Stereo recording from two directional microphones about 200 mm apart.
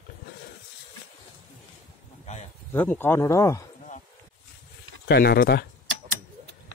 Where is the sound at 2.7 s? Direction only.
10° left (ahead or behind).